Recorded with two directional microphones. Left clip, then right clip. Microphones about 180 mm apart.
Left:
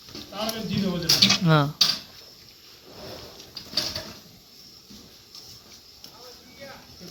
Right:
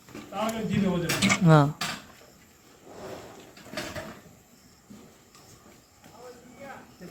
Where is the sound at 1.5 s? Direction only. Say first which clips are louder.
Right 1 dB; 15° right (ahead or behind).